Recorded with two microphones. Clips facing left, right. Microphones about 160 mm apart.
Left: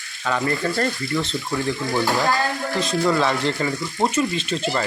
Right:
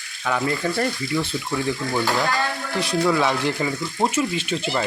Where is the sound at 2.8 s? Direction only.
10° right (ahead or behind).